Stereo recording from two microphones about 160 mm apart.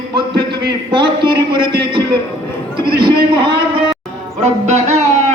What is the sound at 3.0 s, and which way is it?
Speech, 30° right (ahead or behind).